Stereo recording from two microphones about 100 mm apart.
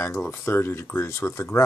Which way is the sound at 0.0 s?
25° left (ahead or behind).